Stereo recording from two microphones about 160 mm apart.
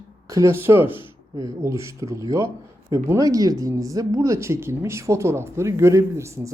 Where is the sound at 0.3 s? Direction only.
20° right (ahead or behind).